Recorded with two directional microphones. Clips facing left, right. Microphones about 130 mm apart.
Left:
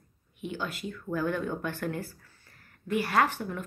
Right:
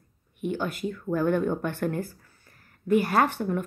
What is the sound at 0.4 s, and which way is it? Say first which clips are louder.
Speech: right 6 dB; 50° right (ahead or behind).